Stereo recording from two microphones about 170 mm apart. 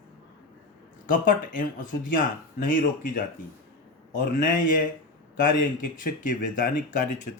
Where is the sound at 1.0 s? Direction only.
55° left (ahead or behind).